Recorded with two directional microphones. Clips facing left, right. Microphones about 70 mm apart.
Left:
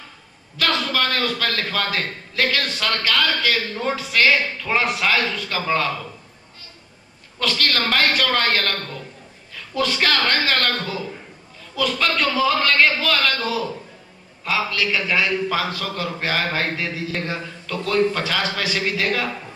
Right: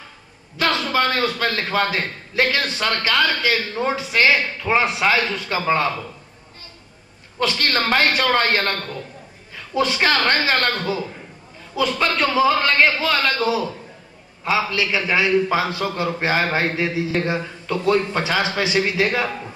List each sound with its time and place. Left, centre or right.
0.6 s a man's voice: right
7.3 s a man's voice: right
9.8 s a man's voice: right